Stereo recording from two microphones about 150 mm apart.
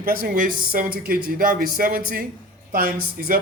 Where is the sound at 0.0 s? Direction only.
75° right (ahead or behind).